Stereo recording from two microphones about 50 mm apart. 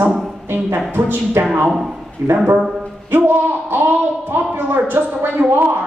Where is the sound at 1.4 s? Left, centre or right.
Right.